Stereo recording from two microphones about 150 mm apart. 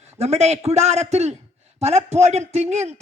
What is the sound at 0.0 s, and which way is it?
Speech, 45° right (ahead or behind).